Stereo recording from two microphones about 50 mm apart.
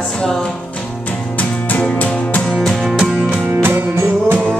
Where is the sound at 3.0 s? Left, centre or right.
Centre.